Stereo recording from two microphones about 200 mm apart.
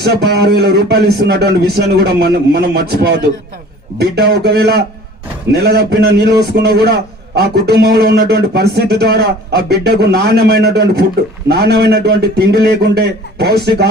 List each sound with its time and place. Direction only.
0.1 s a man's voice: 55° right (ahead or behind)